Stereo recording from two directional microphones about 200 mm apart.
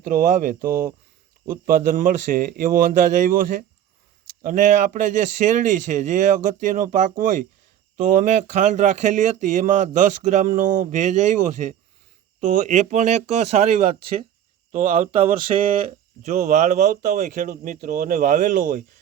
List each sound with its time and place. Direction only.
0.1 s a man's voice: 40° right (ahead or behind)
4.4 s speech: 40° right (ahead or behind)